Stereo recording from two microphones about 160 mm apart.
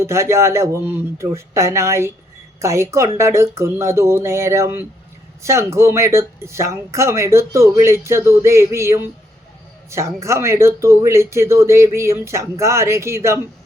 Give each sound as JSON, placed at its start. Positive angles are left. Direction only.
{"t": 0.0, "sound": "speech", "side_deg": -20}